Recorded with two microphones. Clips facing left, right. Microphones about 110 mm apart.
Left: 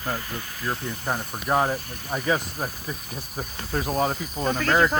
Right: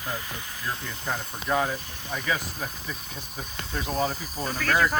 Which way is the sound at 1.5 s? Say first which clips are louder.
Left 4 dB; 35° left (ahead or behind).